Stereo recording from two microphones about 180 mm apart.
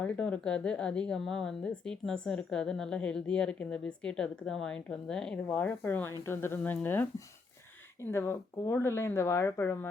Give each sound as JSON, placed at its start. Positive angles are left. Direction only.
{"t": 0.0, "sound": "a woman's voice", "side_deg": 5}
{"t": 8.1, "sound": "speech", "side_deg": 15}